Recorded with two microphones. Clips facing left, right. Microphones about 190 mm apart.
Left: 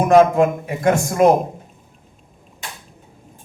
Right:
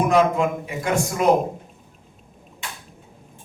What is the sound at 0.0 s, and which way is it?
A man's voice, 50° left (ahead or behind).